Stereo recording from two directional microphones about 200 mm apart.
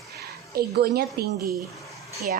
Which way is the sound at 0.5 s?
50° right (ahead or behind).